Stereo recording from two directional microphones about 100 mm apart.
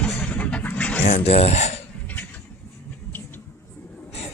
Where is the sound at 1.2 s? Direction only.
90° left.